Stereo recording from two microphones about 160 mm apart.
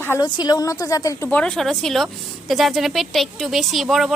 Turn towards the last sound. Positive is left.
turn(degrees=0)  # may be behind; listen again after turning